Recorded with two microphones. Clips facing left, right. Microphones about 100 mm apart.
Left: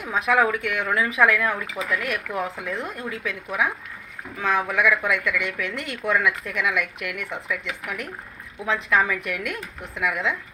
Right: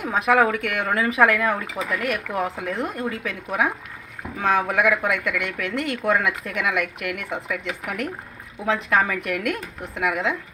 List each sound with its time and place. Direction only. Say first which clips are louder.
0.1 s speech: right 2 dB; 45° right (ahead or behind)